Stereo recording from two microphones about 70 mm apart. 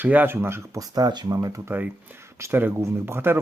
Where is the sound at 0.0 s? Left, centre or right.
Right.